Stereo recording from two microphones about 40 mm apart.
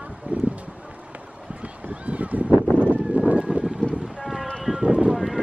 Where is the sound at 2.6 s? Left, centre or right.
Left.